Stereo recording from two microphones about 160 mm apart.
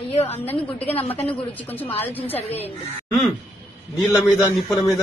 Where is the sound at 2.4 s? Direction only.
40° left (ahead or behind).